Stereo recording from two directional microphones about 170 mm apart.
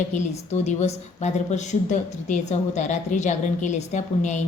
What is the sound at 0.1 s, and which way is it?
A woman's voice, 45° left (ahead or behind).